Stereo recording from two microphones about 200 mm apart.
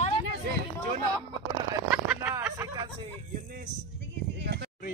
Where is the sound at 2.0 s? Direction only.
10° right (ahead or behind).